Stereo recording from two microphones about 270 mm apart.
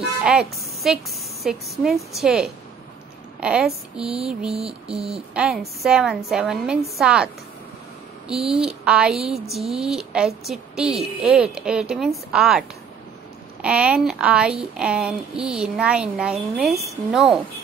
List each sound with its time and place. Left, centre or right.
0.2 s a woman's voice: centre
4.6 s a sound: right
5.3 s a woman's voice: centre
8.3 s a woman's voice: centre